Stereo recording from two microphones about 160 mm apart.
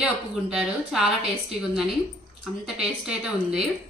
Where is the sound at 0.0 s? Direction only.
5° right (ahead or behind).